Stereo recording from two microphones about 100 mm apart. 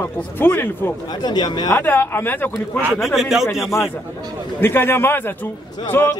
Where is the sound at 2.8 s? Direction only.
5° right (ahead or behind).